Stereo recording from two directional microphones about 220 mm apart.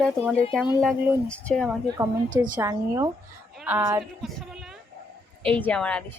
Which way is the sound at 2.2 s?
35° right (ahead or behind).